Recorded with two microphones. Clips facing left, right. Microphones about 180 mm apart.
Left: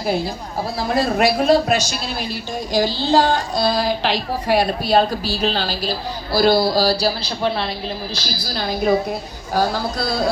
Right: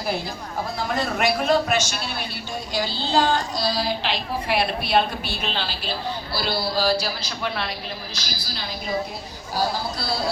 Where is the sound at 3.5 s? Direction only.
55° left (ahead or behind).